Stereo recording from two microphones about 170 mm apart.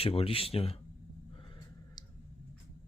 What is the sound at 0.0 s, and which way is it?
Speech, 35° left (ahead or behind).